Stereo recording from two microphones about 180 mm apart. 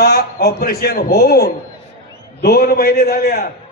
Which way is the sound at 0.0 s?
60° left (ahead or behind).